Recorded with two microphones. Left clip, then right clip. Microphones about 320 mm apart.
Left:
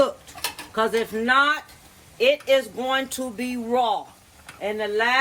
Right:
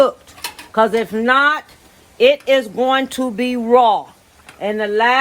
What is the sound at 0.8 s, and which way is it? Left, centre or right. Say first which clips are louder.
Speech: right 8 dB; centre.